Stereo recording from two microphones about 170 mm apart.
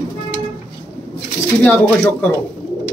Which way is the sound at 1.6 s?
10° left (ahead or behind).